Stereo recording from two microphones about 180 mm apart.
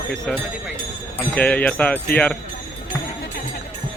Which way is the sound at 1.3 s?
5° left (ahead or behind).